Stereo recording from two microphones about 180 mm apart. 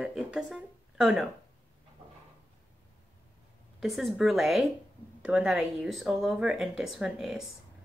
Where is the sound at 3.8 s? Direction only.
Centre (ahead or behind).